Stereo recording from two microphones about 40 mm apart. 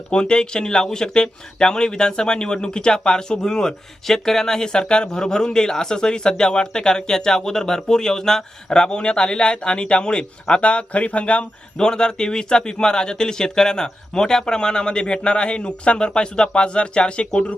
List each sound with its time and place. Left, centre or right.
0.1 s speech: left
11.8 s speech: centre